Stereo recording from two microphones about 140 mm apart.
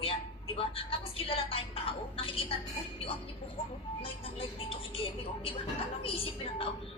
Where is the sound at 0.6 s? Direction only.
40° left (ahead or behind).